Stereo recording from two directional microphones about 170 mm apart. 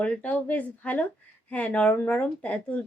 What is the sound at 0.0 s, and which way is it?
Speech, 5° left (ahead or behind).